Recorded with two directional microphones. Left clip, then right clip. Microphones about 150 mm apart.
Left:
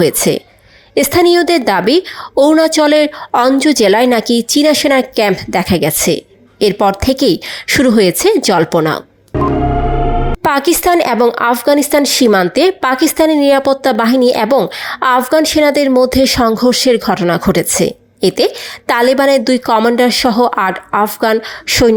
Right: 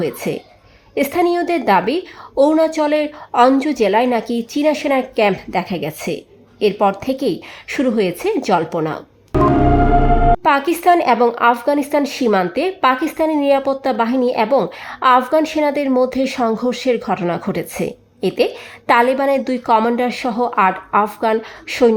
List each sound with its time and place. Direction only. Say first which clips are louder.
0.0 s speech: left 9 dB; 25° left (ahead or behind)
10.4 s speech: left 2 dB; 25° left (ahead or behind)